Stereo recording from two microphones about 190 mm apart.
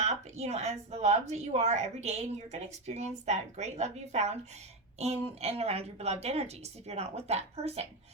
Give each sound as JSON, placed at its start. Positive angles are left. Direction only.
{"t": 0.0, "sound": "speech", "side_deg": -35}